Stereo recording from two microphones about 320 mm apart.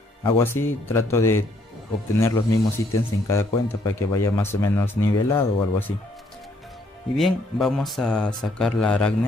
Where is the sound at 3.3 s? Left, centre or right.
Centre.